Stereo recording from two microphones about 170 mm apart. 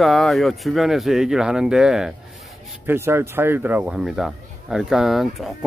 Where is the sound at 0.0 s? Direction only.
Centre (ahead or behind).